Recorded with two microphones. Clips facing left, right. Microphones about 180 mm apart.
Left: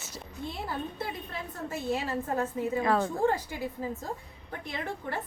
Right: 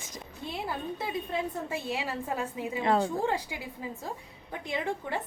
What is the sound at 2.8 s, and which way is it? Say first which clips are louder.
Speech: right 3 dB; 20° right (ahead or behind).